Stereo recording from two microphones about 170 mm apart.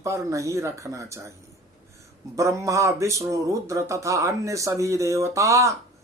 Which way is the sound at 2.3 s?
15° right (ahead or behind).